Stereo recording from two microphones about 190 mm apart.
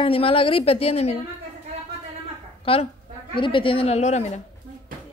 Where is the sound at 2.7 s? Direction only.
30° left (ahead or behind).